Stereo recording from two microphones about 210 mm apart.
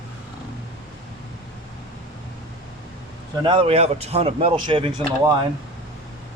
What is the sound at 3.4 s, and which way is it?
Speech, 25° right (ahead or behind).